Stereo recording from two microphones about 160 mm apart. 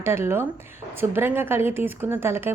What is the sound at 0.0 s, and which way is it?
Speech, 15° right (ahead or behind).